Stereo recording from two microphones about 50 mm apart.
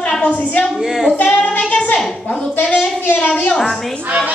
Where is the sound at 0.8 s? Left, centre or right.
Centre.